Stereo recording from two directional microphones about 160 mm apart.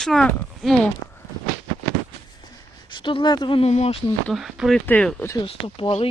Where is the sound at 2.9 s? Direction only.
30° left (ahead or behind).